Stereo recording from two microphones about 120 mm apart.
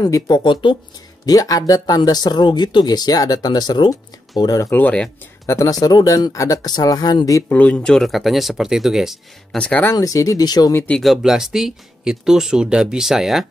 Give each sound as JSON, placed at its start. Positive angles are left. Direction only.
{"t": 0.0, "sound": "speech", "side_deg": 35}
{"t": 1.2, "sound": "speech", "side_deg": 30}
{"t": 4.6, "sound": "speech", "side_deg": 15}
{"t": 5.5, "sound": "speech", "side_deg": 30}
{"t": 7.4, "sound": "speech", "side_deg": 10}
{"t": 9.6, "sound": "speech", "side_deg": 10}
{"t": 9.9, "sound": "speech", "side_deg": 30}
{"t": 10.7, "sound": "speech", "side_deg": 20}
{"t": 11.0, "sound": "speech", "side_deg": 0}